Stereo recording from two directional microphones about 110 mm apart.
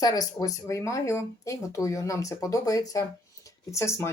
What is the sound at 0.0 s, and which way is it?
Speech, 35° left (ahead or behind).